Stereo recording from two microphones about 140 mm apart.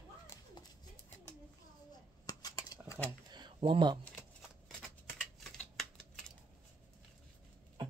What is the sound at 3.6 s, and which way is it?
Speech, 35° right (ahead or behind).